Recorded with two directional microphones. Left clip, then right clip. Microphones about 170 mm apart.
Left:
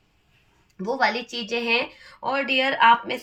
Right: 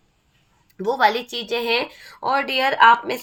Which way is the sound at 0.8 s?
50° right (ahead or behind).